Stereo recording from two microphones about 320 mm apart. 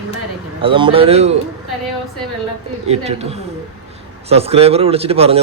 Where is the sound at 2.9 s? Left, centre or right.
Centre.